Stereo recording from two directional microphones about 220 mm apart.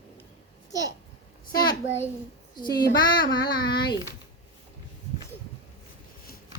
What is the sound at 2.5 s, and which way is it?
A child's voice, 20° left (ahead or behind).